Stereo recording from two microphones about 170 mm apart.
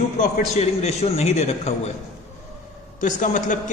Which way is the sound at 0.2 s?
40° left (ahead or behind).